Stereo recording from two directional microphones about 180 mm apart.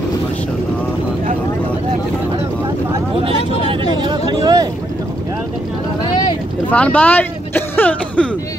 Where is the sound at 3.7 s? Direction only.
25° right (ahead or behind).